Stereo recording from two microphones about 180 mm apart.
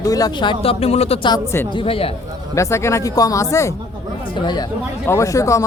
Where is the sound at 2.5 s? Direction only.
15° left (ahead or behind).